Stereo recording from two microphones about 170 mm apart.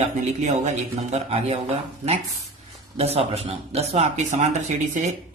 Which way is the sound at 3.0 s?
35° right (ahead or behind).